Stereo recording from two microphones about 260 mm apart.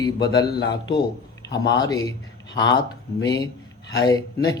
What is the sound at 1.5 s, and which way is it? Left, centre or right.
Speech, left.